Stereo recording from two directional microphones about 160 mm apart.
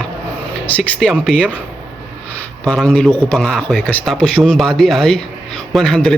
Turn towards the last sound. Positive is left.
turn(degrees=5)  # may be behind; listen again after turning